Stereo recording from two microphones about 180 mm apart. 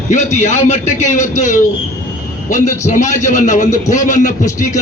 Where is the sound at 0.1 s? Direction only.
40° left (ahead or behind).